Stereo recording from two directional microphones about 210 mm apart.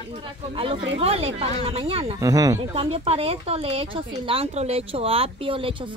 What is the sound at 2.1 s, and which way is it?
Speech, 15° right (ahead or behind).